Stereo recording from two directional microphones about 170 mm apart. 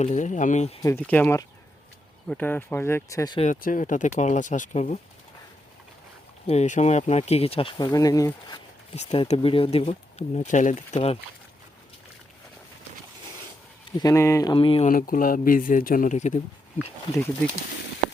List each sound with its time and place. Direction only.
0.0 s speech: 45° left (ahead or behind)
0.8 s speech: 20° left (ahead or behind)
1.0 s speech: 10° left (ahead or behind)
3.5 s speech: 50° left (ahead or behind)
6.5 s speech: 40° left (ahead or behind); by 8.5 s 20° left (ahead or behind)
9.0 s speech: 40° left (ahead or behind)
14.0 s speech: 15° left (ahead or behind)
14.5 s speech: 30° left (ahead or behind)
14.8 s speech: 55° left (ahead or behind)
17.2 s speech: 15° left (ahead or behind)